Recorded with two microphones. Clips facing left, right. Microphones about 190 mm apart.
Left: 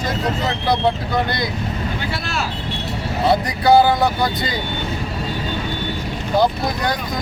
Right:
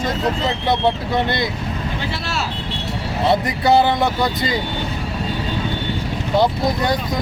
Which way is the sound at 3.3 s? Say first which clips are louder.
Left 1 dB; 25° right (ahead or behind).